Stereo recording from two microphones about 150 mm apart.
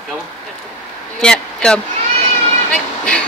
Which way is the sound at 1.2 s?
5° left (ahead or behind).